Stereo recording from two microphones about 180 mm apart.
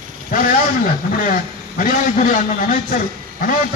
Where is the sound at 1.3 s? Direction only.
50° left (ahead or behind).